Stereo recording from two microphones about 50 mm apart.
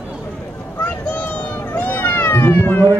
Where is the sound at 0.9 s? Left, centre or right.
Left.